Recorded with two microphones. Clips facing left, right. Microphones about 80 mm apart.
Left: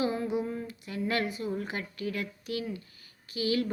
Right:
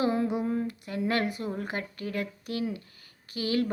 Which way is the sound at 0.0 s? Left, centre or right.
Right.